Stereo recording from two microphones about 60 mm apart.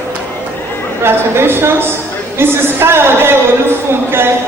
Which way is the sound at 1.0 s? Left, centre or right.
Right.